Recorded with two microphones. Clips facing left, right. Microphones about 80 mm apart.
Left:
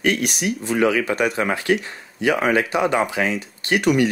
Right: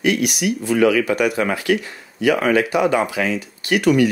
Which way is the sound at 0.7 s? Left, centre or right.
Left.